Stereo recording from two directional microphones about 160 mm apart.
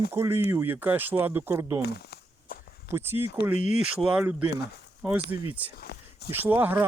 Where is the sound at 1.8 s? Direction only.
85° left.